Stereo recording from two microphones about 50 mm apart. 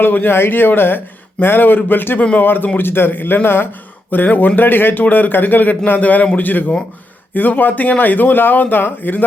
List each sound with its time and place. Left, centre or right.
0.0 s speech: left